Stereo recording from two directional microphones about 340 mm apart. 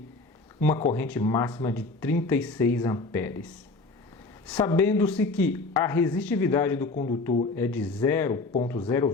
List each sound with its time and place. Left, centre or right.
0.6 s speech: centre
4.5 s speech: centre
7.5 s speech: centre